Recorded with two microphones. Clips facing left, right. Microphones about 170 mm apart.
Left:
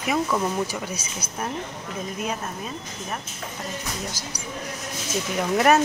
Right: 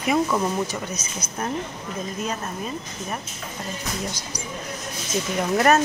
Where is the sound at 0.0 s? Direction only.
Centre (ahead or behind).